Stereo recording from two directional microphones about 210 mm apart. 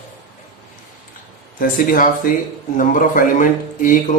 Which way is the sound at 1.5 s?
40° left (ahead or behind).